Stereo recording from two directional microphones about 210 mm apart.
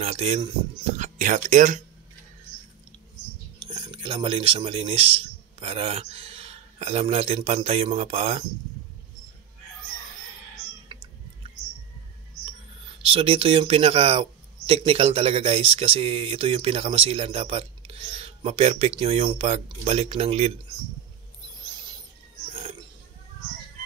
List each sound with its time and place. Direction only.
0.0 s speech: 30° right (ahead or behind)
3.6 s speech: 25° right (ahead or behind)
10.9 s chewing: 20° right (ahead or behind)
13.0 s speech: 25° right (ahead or behind)